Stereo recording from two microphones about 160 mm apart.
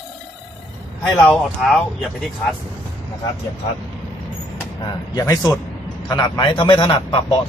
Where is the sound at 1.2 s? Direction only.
Centre (ahead or behind).